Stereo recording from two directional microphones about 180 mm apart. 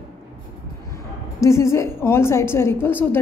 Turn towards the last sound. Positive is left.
turn(degrees=10)  # may be behind; listen again after turning